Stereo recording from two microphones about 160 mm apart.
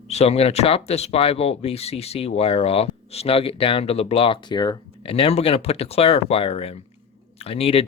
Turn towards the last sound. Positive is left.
turn(degrees=40)  # may be behind; listen again after turning